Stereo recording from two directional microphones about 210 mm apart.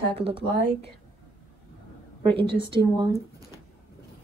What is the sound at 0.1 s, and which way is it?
Speech, 25° right (ahead or behind).